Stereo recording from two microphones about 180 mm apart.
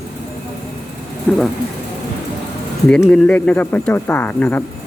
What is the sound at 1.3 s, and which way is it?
Speech, 5° left (ahead or behind).